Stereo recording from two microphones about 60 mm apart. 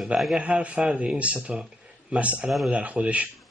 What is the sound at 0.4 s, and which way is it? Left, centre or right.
A man's voice, right.